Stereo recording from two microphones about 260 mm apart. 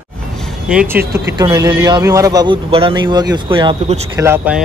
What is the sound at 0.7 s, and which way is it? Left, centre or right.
Speech, centre.